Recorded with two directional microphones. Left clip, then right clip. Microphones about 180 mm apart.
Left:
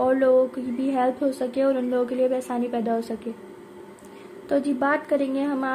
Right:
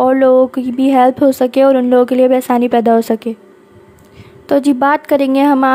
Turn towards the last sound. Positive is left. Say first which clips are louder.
# right 15 dB
turn(degrees=-40)  # may be behind; listen again after turning